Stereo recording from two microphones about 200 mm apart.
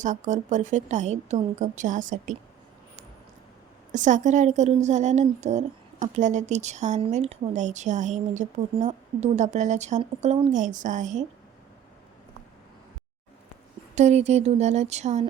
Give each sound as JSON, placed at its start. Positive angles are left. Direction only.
{"t": 0.0, "sound": "a woman's voice", "side_deg": -40}
{"t": 3.9, "sound": "a woman's voice", "side_deg": -40}
{"t": 13.9, "sound": "a woman's voice", "side_deg": -35}